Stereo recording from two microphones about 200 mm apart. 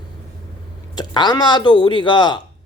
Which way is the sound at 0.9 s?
20° left (ahead or behind).